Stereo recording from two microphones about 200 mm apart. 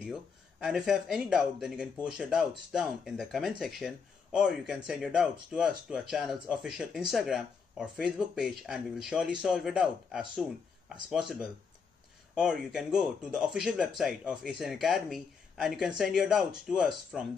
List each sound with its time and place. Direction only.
0.0 s speech: 5° right (ahead or behind)